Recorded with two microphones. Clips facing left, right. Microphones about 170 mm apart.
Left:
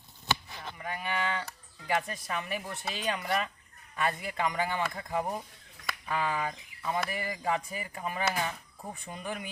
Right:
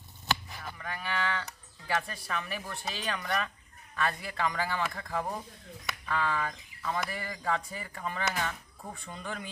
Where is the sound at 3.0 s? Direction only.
20° left (ahead or behind).